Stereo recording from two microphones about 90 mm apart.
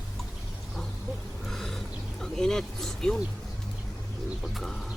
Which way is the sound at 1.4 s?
5° left (ahead or behind).